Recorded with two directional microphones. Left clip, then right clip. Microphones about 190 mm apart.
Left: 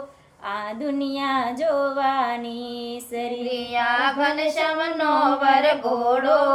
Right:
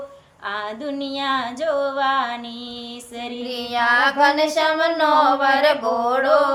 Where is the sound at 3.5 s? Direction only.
55° right (ahead or behind).